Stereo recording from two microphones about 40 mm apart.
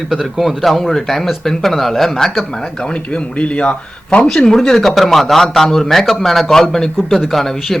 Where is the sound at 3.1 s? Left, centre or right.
Left.